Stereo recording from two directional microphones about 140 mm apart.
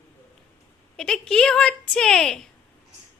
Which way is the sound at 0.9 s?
5° left (ahead or behind).